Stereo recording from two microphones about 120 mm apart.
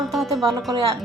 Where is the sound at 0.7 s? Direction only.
30° right (ahead or behind).